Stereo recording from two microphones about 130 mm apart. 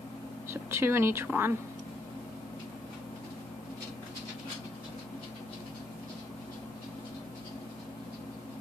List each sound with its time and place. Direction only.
0.5 s speech: 20° right (ahead or behind)